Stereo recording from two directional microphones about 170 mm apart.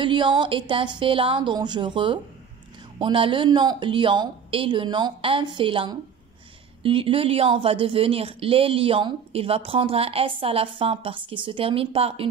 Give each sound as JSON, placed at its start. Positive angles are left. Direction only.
{"t": 0.0, "sound": "a woman's voice", "side_deg": -30}